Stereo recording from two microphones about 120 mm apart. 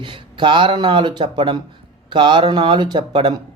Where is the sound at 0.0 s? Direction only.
40° right (ahead or behind).